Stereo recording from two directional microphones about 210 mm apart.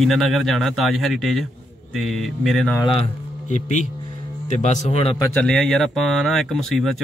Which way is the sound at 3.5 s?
35° left (ahead or behind).